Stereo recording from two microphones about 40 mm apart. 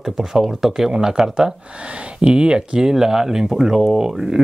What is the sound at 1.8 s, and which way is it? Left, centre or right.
Speech, right.